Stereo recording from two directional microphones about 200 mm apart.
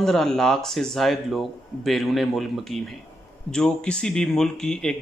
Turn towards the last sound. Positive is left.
turn(degrees=5)  # may be behind; listen again after turning